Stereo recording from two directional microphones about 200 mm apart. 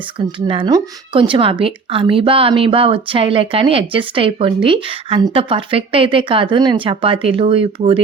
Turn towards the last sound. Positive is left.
turn(degrees=-25)  # may be behind; listen again after turning